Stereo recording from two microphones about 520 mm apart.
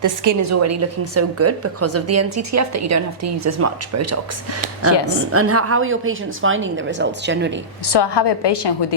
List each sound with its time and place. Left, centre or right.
0.0 s a woman's voice: right
5.3 s a woman's voice: right
7.9 s a woman's voice: left